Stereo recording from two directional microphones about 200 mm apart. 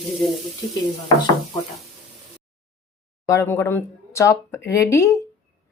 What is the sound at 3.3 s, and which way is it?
Speech, 15° left (ahead or behind).